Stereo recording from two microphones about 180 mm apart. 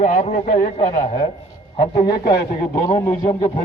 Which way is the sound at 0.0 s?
45° left (ahead or behind).